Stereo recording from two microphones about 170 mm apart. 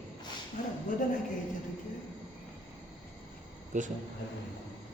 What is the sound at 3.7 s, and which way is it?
Speech, 45° right (ahead or behind).